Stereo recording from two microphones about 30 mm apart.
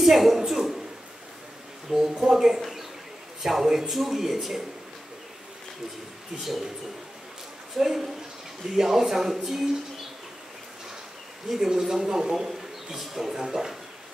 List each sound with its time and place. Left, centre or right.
0.0 s speech: centre
0.5 s a man's voice: centre
1.9 s speech: centre
2.6 s a sound: centre
3.4 s speech: centre
6.3 s speech: centre
7.7 s speech: centre
11.4 s speech: centre
12.0 s speech: centre
12.4 s speech: centre